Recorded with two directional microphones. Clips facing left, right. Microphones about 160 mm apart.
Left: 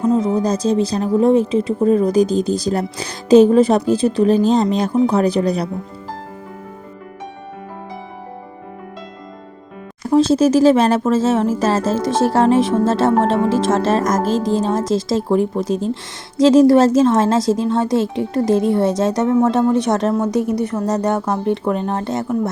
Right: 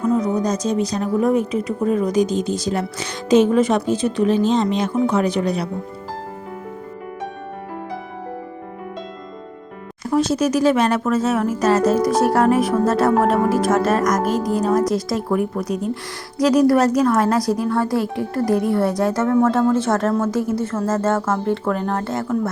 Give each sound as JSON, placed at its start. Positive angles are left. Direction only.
{"t": 0.0, "sound": "speech", "side_deg": 25}
{"t": 10.1, "sound": "speech", "side_deg": 30}